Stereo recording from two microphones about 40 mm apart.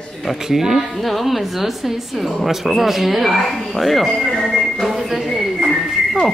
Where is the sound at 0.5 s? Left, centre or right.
Centre.